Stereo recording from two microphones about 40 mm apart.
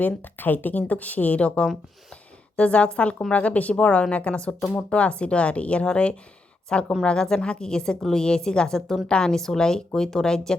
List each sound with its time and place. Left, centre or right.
0.0 s speech: left
0.8 s a woman's voice: left; by 10.6 s centre